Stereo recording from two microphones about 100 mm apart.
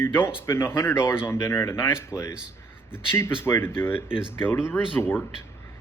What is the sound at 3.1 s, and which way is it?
Speech, 25° left (ahead or behind).